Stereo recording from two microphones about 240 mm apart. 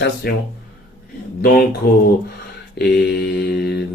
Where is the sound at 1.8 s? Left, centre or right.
Left.